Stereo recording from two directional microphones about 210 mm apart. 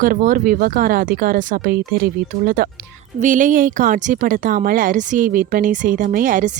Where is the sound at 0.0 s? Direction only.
40° right (ahead or behind).